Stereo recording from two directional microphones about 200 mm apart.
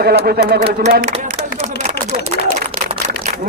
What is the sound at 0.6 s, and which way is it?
Speech, 30° right (ahead or behind).